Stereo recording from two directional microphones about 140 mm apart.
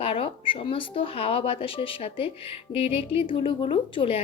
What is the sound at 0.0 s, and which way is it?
Speech, 40° left (ahead or behind).